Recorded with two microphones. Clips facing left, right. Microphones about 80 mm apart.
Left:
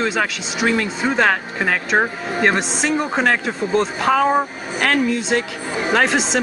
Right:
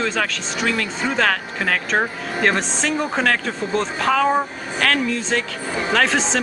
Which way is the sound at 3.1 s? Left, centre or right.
Centre.